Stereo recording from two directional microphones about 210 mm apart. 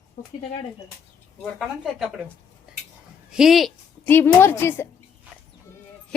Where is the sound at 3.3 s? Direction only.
Centre (ahead or behind).